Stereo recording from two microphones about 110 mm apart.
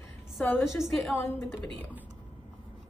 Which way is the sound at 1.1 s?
25° left (ahead or behind).